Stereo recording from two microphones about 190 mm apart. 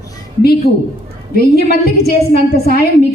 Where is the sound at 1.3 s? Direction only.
55° left (ahead or behind).